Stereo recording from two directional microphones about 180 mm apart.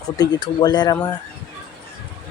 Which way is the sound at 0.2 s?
20° left (ahead or behind).